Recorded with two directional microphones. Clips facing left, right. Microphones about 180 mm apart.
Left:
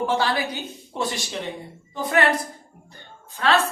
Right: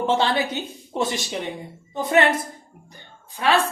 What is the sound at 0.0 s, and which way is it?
A woman's voice, 25° right (ahead or behind).